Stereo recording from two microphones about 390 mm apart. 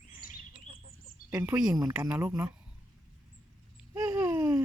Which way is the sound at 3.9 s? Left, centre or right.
Centre.